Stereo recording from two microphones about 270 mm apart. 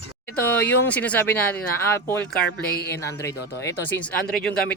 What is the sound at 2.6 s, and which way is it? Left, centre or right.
Speech, left.